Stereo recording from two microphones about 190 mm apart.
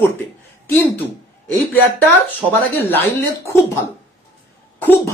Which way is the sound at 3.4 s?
15° left (ahead or behind).